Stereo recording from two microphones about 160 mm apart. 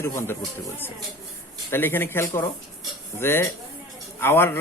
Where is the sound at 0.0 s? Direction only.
15° left (ahead or behind).